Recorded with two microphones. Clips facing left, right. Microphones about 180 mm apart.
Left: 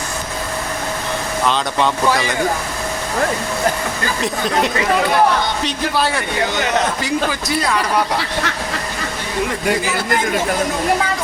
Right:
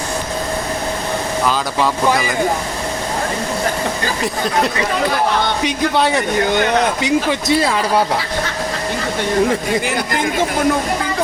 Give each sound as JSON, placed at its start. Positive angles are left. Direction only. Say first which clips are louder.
{"t": 1.5, "sound": "speech", "louder": "left 1 dB", "side_deg": -5}
{"t": 4.2, "sound": "speech", "louder": "even", "side_deg": 0}
{"t": 5.6, "sound": "speech", "louder": "right 3 dB", "side_deg": -20}